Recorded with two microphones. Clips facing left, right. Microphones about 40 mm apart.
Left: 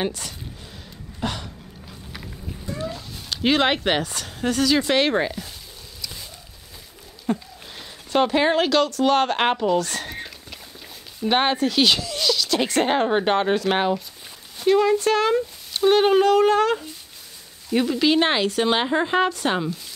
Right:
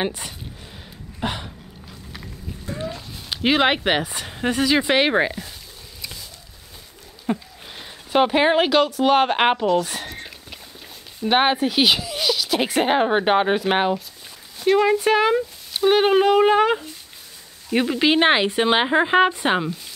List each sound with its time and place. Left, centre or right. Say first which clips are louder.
0.0 s speech: right 1 dB; right
1.2 s a sound: right 1 dB; right
2.7 s speech: even; centre
7.2 s speech: even; centre
11.2 s speech: right 2 dB; centre